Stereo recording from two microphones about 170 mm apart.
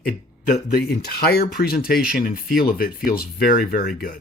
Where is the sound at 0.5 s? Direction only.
70° left (ahead or behind).